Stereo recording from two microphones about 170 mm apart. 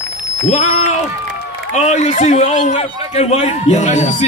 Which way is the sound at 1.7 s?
45° left (ahead or behind).